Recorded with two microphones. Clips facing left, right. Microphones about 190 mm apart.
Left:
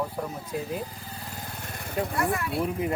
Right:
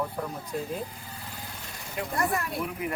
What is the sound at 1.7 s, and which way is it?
Vehicle, 60° left (ahead or behind).